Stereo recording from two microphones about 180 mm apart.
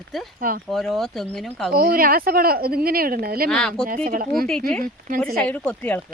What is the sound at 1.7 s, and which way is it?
Speech, 55° right (ahead or behind).